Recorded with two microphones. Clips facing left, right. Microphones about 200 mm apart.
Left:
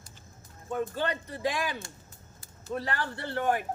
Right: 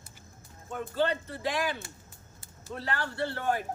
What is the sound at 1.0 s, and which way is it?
Speech, 15° left (ahead or behind).